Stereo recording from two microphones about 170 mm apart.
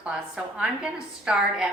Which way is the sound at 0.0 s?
5° right (ahead or behind).